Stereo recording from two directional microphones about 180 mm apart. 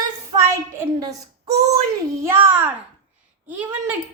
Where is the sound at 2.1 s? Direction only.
15° right (ahead or behind).